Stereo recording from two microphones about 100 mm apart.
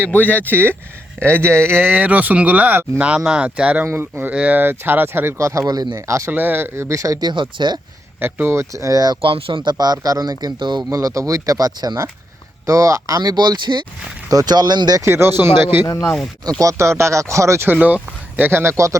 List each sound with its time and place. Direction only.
0.1 s speech: 15° left (ahead or behind)
0.4 s speech: 20° right (ahead or behind); by 6.0 s 45° right (ahead or behind)
6.1 s speech: 30° right (ahead or behind)
6.3 s speech: 20° right (ahead or behind); by 7.8 s 50° right (ahead or behind)
8.2 s speech: 25° right (ahead or behind); by 9.1 s 40° right (ahead or behind)
9.2 s speech: 60° right (ahead or behind); by 10.8 s 45° right (ahead or behind)
10.9 s speech: 35° right (ahead or behind)
15.0 s speech: 25° right (ahead or behind)
15.8 s speech: 35° left (ahead or behind)
16.0 s speech: 5° left (ahead or behind)
16.6 s speech: 30° right (ahead or behind)
17.7 s speech: 15° right (ahead or behind)